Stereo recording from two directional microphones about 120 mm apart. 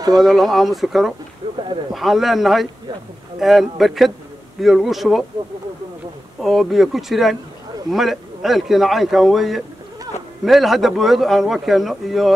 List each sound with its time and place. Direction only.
0.2 s a man's voice: centre (ahead or behind)
1.4 s a sound: 35° right (ahead or behind)
2.0 s a man's voice: centre (ahead or behind)
6.4 s a man's voice: centre (ahead or behind)